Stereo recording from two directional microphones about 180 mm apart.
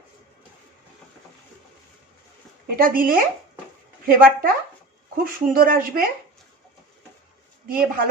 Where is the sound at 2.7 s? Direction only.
50° right (ahead or behind).